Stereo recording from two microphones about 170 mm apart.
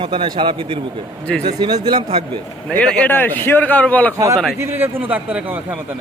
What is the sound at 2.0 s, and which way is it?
Speech, 35° right (ahead or behind).